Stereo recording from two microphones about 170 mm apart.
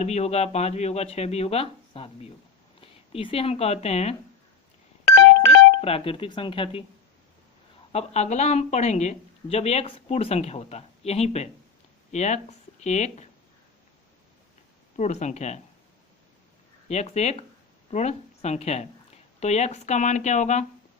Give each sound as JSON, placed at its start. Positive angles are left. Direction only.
{"t": 0.0, "sound": "a woman's voice", "side_deg": 40}
{"t": 5.8, "sound": "a woman's voice", "side_deg": 35}
{"t": 7.9, "sound": "a woman's voice", "side_deg": 40}
{"t": 14.9, "sound": "speech", "side_deg": 45}
{"t": 16.9, "sound": "a woman's voice", "side_deg": 40}